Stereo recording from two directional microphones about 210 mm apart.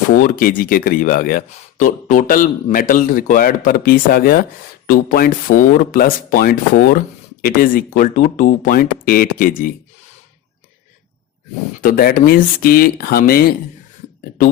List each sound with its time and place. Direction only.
0.3 s speech: 45° left (ahead or behind)
11.8 s speech: 45° left (ahead or behind)